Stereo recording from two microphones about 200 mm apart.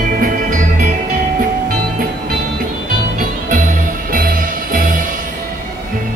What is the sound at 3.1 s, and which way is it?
Music, 40° right (ahead or behind).